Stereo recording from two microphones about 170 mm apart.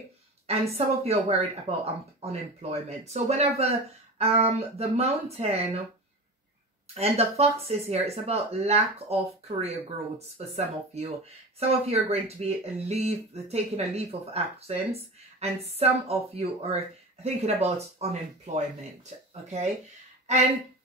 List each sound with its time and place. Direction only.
0.5 s speech: 35° right (ahead or behind)
6.9 s speech: 35° right (ahead or behind)